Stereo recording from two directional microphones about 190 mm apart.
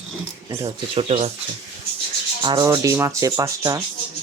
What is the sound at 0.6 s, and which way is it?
Speech, 30° right (ahead or behind).